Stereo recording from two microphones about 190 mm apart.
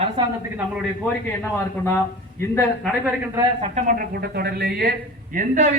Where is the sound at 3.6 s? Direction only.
40° right (ahead or behind); by 4.9 s 55° right (ahead or behind).